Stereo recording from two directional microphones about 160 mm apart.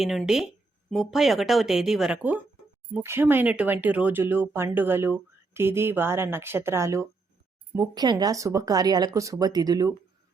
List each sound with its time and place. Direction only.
0.0 s speech: centre (ahead or behind); by 9.9 s 25° right (ahead or behind)